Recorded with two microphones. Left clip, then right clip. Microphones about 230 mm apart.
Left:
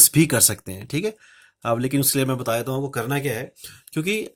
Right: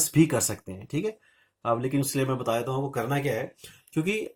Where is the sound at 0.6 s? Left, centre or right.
Left.